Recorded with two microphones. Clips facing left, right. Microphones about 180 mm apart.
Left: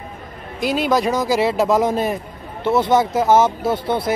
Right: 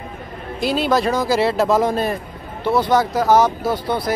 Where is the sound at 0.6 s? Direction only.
15° left (ahead or behind).